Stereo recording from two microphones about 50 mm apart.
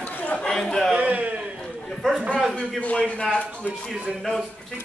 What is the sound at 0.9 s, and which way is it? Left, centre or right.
Speech, right.